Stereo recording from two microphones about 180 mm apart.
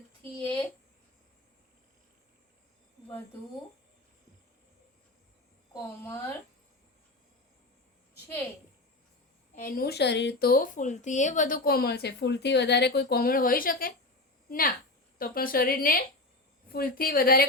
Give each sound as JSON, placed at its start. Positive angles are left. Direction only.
{"t": 0.2, "sound": "a sound", "side_deg": 10}
{"t": 5.7, "sound": "a woman's voice", "side_deg": 15}
{"t": 9.6, "sound": "a woman's voice", "side_deg": 55}